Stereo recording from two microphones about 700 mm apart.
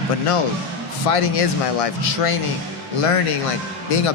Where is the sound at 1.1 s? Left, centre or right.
Left.